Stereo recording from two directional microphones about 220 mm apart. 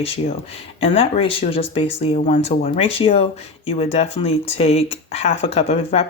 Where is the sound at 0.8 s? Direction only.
25° left (ahead or behind).